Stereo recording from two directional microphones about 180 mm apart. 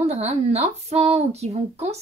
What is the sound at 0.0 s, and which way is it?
Speech, 35° right (ahead or behind).